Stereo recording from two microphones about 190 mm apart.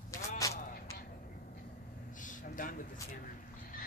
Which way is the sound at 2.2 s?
45° left (ahead or behind).